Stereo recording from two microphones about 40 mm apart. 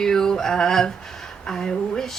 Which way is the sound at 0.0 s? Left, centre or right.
Centre.